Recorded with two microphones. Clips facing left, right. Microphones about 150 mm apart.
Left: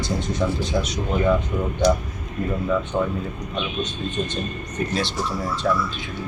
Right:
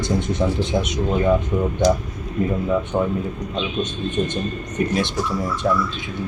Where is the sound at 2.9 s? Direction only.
20° right (ahead or behind).